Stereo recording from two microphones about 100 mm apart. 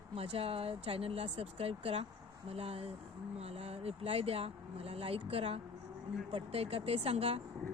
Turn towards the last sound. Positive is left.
turn(degrees=-90)